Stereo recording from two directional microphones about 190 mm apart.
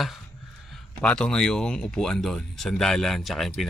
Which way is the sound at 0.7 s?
5° left (ahead or behind).